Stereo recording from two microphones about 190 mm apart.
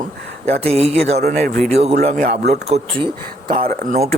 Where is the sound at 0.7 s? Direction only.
35° right (ahead or behind).